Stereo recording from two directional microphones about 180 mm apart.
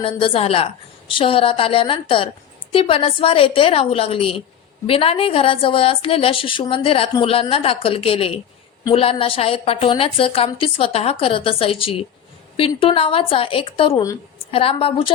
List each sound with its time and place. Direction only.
0.0 s a woman's voice: 30° left (ahead or behind)